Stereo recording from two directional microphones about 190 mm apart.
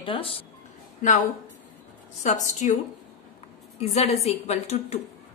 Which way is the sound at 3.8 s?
35° left (ahead or behind).